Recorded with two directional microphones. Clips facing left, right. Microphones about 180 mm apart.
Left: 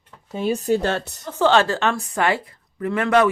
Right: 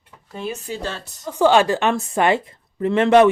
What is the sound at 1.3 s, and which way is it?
A woman's voice, 15° right (ahead or behind).